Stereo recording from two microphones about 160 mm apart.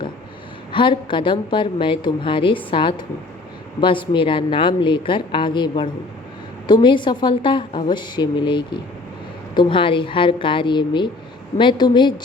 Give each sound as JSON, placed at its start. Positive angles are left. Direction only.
{"t": 0.7, "sound": "a woman's voice", "side_deg": 30}